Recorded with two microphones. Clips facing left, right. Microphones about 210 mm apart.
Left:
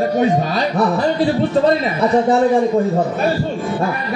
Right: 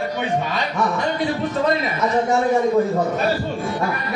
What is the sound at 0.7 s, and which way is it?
Speech, 35° left (ahead or behind).